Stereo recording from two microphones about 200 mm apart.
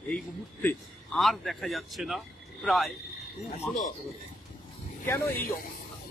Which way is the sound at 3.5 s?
40° left (ahead or behind).